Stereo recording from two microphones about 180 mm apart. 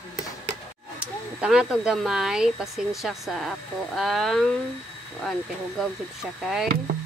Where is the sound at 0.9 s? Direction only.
5° right (ahead or behind).